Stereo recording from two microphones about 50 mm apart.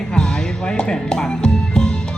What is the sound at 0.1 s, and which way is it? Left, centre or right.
Music, centre.